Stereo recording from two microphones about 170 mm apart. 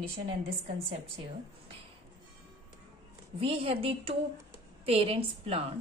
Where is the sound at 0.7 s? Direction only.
35° right (ahead or behind).